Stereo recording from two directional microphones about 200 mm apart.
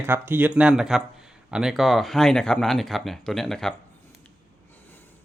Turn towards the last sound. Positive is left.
turn(degrees=0)  # may be behind; listen again after turning